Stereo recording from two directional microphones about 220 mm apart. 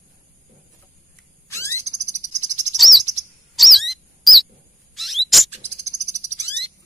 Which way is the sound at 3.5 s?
Centre (ahead or behind).